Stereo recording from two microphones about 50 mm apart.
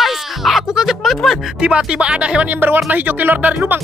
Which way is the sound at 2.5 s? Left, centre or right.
Right.